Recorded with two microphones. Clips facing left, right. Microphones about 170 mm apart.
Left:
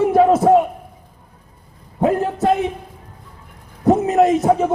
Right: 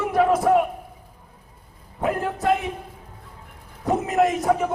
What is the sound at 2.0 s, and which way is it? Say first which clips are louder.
Speech: left 6 dB; 30° left (ahead or behind).